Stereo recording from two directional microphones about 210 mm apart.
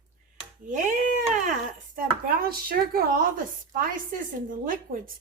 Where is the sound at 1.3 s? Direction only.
35° right (ahead or behind).